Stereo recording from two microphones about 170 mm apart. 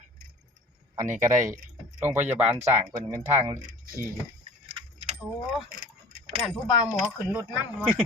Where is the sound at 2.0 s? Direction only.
15° right (ahead or behind).